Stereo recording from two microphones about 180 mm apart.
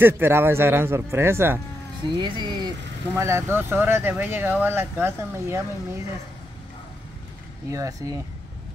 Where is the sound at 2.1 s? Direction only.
25° right (ahead or behind).